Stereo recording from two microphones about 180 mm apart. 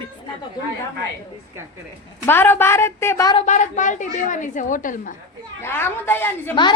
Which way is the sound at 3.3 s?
40° left (ahead or behind).